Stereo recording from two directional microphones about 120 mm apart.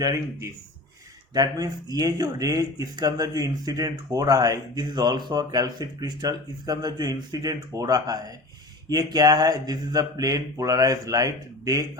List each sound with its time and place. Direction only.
0.0 s speech: 25° right (ahead or behind)